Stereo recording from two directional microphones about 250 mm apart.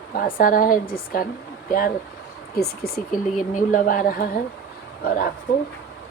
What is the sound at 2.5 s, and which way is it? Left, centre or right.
Speech, left.